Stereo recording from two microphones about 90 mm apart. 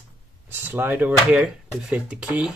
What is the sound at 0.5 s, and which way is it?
Speech, 20° right (ahead or behind).